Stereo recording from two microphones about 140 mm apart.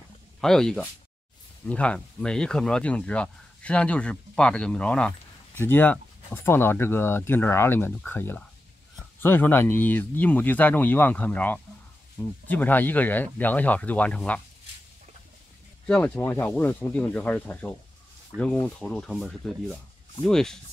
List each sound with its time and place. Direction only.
0.4 s speech: 5° left (ahead or behind)
15.9 s speech: 15° left (ahead or behind)
18.3 s speech: 20° right (ahead or behind)
18.8 s speech: 5° left (ahead or behind)